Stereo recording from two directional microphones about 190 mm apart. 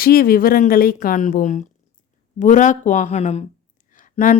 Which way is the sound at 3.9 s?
45° left (ahead or behind).